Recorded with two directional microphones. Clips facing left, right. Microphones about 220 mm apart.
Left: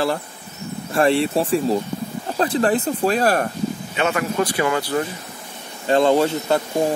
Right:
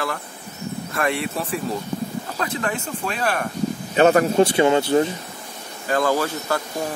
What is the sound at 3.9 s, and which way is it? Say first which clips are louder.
Speech: right 8 dB; 40° right (ahead or behind).